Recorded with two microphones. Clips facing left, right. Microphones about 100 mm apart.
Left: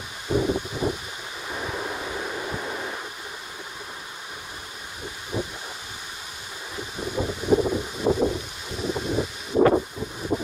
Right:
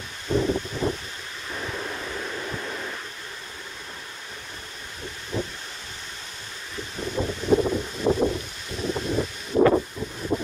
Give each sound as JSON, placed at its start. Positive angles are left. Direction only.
{"t": 0.3, "sound": "rustling leaves", "side_deg": 10}
{"t": 1.5, "sound": "waves", "side_deg": 30}
{"t": 5.3, "sound": "rustling leaves", "side_deg": 15}
{"t": 7.0, "sound": "a sound", "side_deg": 10}
{"t": 9.8, "sound": "wind", "side_deg": 0}